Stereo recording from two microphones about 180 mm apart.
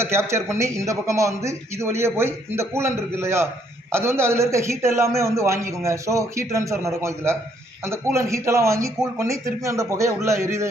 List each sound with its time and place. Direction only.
0.0 s a man's voice: 15° right (ahead or behind)